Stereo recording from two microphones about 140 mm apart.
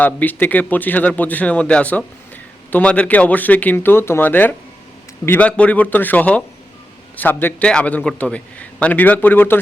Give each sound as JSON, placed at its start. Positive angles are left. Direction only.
{"t": 0.0, "sound": "speech", "side_deg": 10}